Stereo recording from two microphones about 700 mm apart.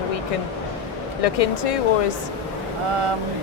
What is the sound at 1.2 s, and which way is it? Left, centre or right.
Speech, left.